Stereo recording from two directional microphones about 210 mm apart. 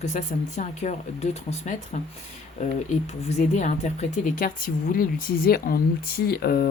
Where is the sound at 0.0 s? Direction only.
35° left (ahead or behind).